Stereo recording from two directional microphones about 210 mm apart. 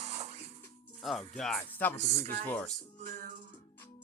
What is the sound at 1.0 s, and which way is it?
Speech, centre (ahead or behind).